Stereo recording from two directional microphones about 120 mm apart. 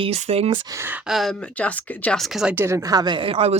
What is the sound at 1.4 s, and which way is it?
Speech, 10° left (ahead or behind).